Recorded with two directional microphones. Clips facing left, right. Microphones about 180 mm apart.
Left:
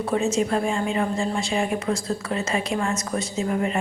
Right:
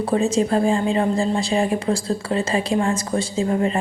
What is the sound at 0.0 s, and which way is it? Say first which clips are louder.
A woman's voice: right 3 dB; 35° right (ahead or behind).